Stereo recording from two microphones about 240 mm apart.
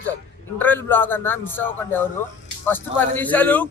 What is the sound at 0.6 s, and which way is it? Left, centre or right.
A man's voice, centre.